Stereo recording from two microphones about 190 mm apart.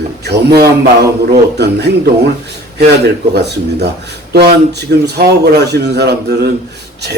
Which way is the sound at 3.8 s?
60° right (ahead or behind).